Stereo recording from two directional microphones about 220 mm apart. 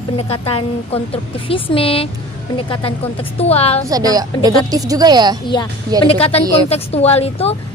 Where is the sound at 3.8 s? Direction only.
15° right (ahead or behind).